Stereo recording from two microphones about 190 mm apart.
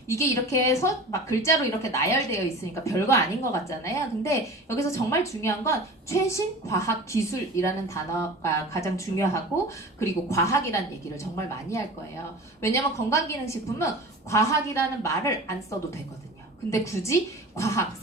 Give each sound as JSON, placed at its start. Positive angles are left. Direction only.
{"t": 0.1, "sound": "a woman's voice", "side_deg": 15}